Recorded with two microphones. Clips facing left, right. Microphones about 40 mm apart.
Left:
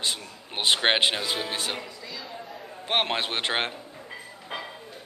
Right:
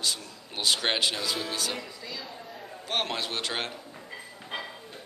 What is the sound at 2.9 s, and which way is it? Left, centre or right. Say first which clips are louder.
Speech: left 5 dB; left.